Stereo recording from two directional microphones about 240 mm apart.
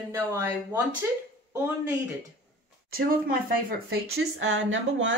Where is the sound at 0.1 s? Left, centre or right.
Centre.